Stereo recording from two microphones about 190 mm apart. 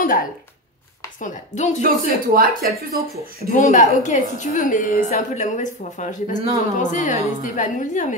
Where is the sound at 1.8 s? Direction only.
50° right (ahead or behind).